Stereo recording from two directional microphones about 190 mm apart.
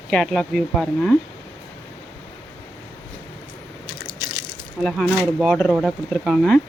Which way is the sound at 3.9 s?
25° left (ahead or behind).